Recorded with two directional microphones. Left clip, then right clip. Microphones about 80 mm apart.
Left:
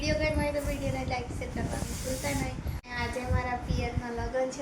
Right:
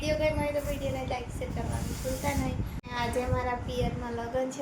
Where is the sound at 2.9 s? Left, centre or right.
Right.